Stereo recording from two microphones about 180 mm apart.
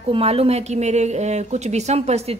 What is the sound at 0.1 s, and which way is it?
A woman's voice, 35° right (ahead or behind).